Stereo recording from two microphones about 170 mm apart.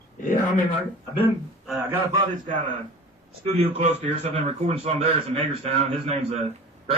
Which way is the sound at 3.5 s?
35° right (ahead or behind).